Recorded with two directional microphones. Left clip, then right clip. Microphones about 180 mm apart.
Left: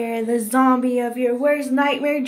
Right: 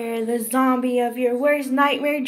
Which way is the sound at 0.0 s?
15° left (ahead or behind).